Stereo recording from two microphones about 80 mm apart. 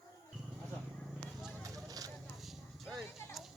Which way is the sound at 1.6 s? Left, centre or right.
Right.